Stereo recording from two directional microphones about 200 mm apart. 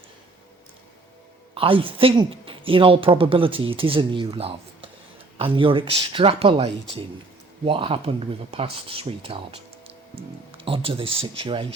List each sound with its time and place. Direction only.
1.5 s speech: 25° right (ahead or behind)